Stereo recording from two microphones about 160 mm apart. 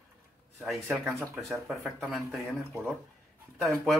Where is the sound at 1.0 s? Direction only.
Centre (ahead or behind).